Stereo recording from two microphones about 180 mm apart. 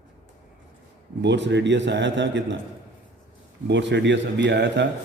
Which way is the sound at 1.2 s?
75° right (ahead or behind).